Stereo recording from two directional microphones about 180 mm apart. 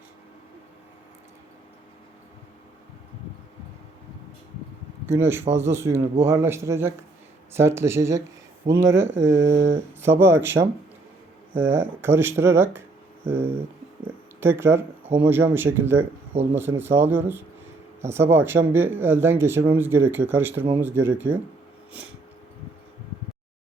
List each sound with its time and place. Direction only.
5.0 s speech: 15° right (ahead or behind)
9.5 s speech: 35° right (ahead or behind)
10.0 s speech: 15° right (ahead or behind)
16.3 s speech: 35° right (ahead or behind)
16.6 s speech: 10° right (ahead or behind)